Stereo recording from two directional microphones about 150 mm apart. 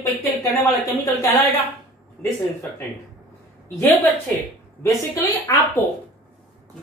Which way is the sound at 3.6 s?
20° left (ahead or behind).